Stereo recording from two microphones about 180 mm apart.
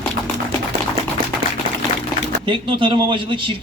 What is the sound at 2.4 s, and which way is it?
A man's voice, 25° right (ahead or behind).